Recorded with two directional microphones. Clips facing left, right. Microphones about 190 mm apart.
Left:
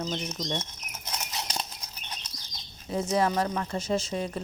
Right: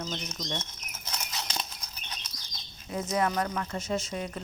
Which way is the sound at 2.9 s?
30° left (ahead or behind).